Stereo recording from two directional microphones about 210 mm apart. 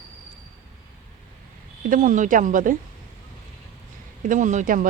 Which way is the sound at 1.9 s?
35° right (ahead or behind).